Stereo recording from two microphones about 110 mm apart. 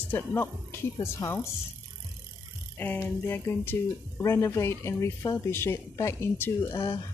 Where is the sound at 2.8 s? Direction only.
20° left (ahead or behind).